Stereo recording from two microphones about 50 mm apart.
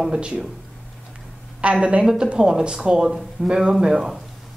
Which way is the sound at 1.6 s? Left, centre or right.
Right.